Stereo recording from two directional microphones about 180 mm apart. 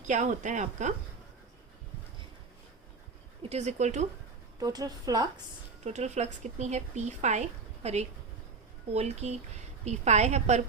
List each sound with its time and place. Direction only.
0.1 s speech: 40° right (ahead or behind)
3.5 s speech: 40° right (ahead or behind)
4.6 s speech: 20° right (ahead or behind)
5.8 s speech: 40° right (ahead or behind)